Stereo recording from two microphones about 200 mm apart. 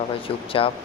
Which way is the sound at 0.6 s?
25° left (ahead or behind).